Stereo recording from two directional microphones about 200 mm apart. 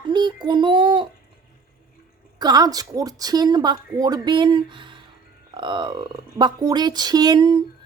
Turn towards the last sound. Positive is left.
turn(degrees=-20)  # may be behind; listen again after turning